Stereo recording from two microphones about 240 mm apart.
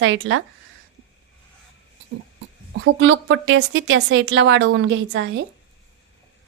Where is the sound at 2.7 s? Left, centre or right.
Right.